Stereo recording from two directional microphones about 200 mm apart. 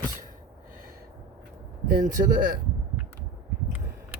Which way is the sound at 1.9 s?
40° right (ahead or behind).